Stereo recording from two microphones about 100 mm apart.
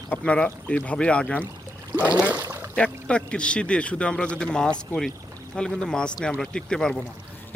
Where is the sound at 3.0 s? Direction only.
10° left (ahead or behind).